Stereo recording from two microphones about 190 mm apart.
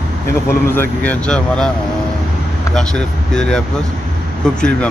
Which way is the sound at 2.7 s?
5° left (ahead or behind).